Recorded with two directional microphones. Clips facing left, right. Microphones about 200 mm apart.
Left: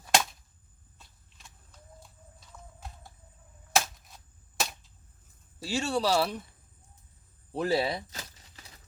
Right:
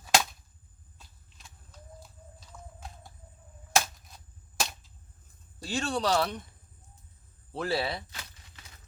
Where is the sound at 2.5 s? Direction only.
Centre (ahead or behind).